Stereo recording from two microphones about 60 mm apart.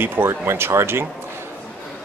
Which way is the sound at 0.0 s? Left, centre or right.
Right.